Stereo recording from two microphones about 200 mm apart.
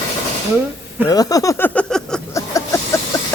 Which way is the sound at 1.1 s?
20° left (ahead or behind).